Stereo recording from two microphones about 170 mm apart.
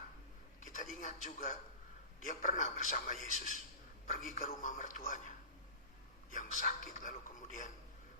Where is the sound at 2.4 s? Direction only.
50° left (ahead or behind).